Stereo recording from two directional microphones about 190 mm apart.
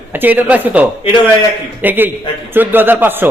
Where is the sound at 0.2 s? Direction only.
10° right (ahead or behind).